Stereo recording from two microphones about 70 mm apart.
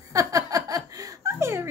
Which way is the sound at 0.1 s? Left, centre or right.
Right.